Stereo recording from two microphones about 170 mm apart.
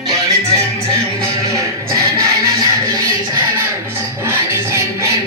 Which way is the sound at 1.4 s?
20° right (ahead or behind).